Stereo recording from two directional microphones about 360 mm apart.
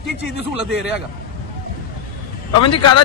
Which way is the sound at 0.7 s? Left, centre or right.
Centre.